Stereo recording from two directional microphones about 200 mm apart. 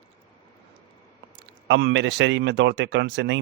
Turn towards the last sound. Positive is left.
turn(degrees=-60)  # may be behind; listen again after turning